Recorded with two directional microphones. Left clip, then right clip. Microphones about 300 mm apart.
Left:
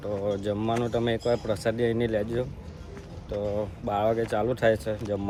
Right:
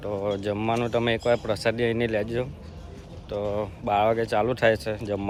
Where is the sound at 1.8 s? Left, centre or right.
Right.